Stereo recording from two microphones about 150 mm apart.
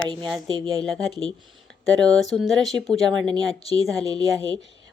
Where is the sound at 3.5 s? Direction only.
40° left (ahead or behind).